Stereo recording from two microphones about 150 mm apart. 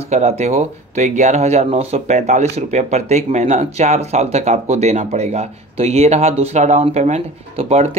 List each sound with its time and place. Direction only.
0.1 s speech: 45° right (ahead or behind)